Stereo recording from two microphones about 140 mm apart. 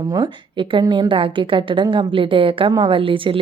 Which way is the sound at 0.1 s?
30° right (ahead or behind).